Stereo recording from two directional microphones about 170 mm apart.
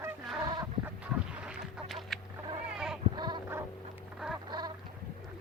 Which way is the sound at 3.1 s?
25° right (ahead or behind).